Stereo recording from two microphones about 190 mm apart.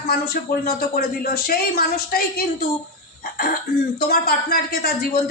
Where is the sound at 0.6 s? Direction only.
55° left (ahead or behind).